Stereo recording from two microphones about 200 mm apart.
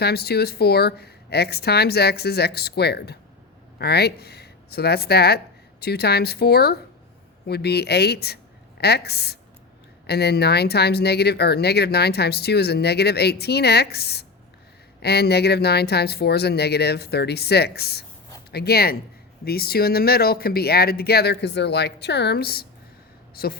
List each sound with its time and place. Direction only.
0.0 s speech: 55° left (ahead or behind)